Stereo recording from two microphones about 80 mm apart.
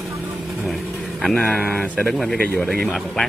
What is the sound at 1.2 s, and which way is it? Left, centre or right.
Speech, centre.